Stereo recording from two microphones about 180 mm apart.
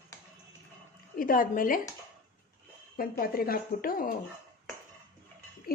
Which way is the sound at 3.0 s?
55° left (ahead or behind).